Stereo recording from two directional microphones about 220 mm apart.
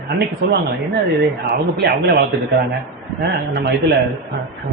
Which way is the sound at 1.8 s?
45° right (ahead or behind).